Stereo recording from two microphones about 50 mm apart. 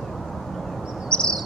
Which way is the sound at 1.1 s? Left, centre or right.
Centre.